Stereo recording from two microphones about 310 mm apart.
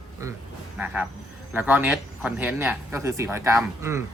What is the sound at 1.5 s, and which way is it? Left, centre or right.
Speech, centre.